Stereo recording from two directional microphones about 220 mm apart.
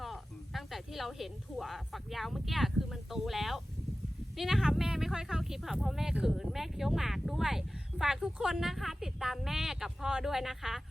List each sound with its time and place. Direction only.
0.0 s speech: centre (ahead or behind)